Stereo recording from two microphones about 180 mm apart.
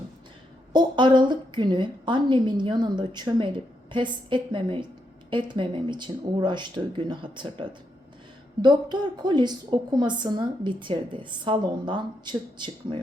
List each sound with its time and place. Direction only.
0.7 s a woman's voice: 25° right (ahead or behind)